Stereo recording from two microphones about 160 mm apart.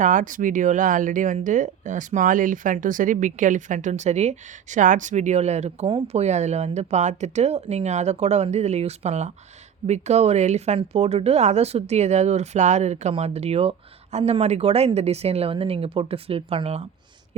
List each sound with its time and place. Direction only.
0.0 s speech: 55° right (ahead or behind)